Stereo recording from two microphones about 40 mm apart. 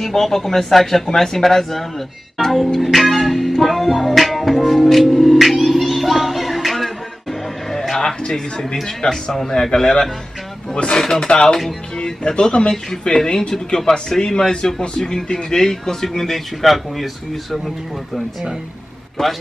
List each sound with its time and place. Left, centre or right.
0.0 s speech: centre
2.5 s music: centre
7.7 s a sound: centre
8.8 s speech: centre